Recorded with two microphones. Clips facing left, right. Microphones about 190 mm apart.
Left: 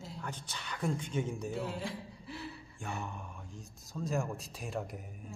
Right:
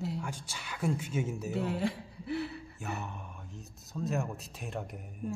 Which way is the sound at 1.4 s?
70° right (ahead or behind).